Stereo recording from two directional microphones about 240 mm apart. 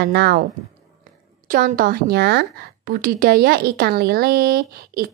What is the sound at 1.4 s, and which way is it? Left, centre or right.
Speech, right.